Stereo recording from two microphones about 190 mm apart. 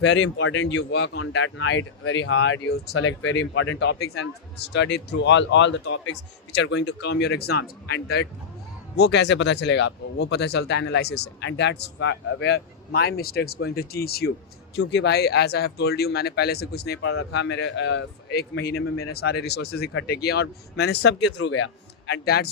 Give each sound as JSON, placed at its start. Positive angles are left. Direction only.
{"t": 0.0, "sound": "speech", "side_deg": 75}
{"t": 14.8, "sound": "speech", "side_deg": 65}
{"t": 20.1, "sound": "speech", "side_deg": 60}
{"t": 22.0, "sound": "a man's voice", "side_deg": 60}